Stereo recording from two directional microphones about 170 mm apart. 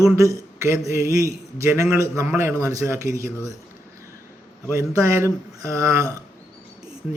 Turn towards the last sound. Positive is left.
turn(degrees=-15)  # may be behind; listen again after turning